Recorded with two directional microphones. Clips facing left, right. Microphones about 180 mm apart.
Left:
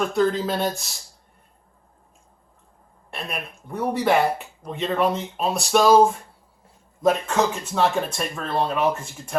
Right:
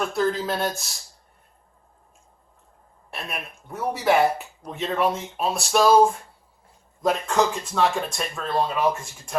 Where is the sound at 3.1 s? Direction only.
5° right (ahead or behind).